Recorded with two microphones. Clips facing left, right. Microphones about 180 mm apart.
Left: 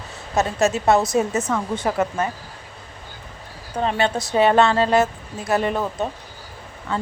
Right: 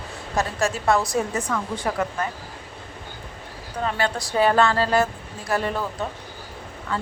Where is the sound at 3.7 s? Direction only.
20° left (ahead or behind).